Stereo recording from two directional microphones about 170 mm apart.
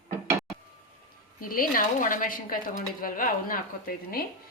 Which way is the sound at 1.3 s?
55° left (ahead or behind).